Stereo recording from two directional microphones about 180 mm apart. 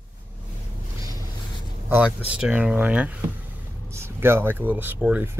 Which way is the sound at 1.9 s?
10° right (ahead or behind).